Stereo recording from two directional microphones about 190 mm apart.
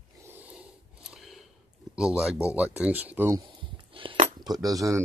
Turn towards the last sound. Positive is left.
turn(degrees=-15)  # may be behind; listen again after turning